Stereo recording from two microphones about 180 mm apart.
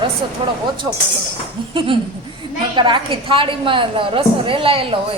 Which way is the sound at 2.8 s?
25° right (ahead or behind).